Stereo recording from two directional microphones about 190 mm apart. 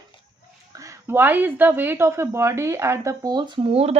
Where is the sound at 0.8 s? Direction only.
15° right (ahead or behind).